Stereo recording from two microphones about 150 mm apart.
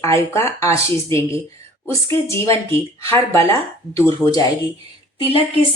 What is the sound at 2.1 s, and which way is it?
A woman's voice, 20° left (ahead or behind).